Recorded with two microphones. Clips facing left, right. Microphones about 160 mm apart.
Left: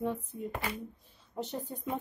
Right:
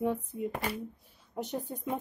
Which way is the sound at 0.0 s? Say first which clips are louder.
Right 3 dB; 15° right (ahead or behind).